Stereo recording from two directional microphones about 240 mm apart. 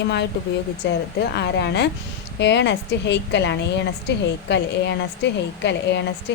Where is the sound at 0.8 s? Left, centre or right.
Left.